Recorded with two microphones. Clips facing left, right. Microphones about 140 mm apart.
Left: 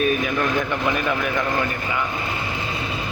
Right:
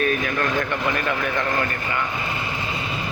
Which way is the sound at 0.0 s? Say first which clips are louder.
Left 2 dB; 10° left (ahead or behind).